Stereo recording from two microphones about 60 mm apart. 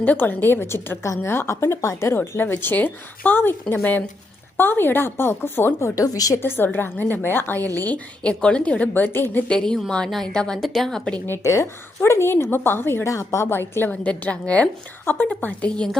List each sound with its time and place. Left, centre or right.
0.0 s a woman's voice: left
2.1 s a woman's voice: left
5.8 s a woman's voice: left
7.1 s a woman's voice: left; by 8.9 s centre
8.9 s a woman's voice: left
9.5 s a woman's voice: centre
11.4 s a woman's voice: left
12.3 s a woman's voice: left
13.1 s a woman's voice: left
13.9 s a woman's voice: left
15.7 s a woman's voice: centre